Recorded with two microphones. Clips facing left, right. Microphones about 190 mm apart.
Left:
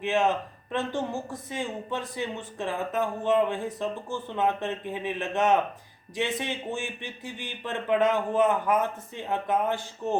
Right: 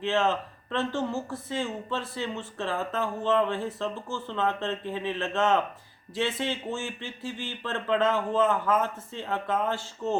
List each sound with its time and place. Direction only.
0.0 s speech: 15° left (ahead or behind)